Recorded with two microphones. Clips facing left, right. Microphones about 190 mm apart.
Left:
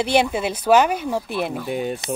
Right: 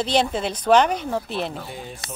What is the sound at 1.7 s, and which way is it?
Speech, 70° left (ahead or behind).